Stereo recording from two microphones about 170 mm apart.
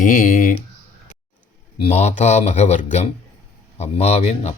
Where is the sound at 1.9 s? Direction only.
45° left (ahead or behind).